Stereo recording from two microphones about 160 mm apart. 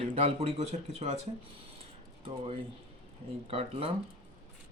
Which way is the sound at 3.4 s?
35° right (ahead or behind).